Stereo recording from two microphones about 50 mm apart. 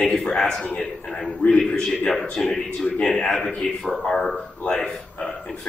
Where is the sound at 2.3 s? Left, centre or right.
Centre.